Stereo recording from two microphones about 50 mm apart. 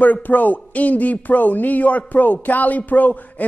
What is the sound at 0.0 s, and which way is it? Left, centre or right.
Speech, left.